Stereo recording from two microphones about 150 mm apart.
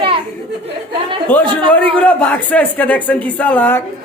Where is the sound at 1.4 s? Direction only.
35° right (ahead or behind).